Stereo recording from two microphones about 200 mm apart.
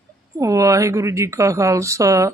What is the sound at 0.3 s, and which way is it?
Speech, 15° right (ahead or behind).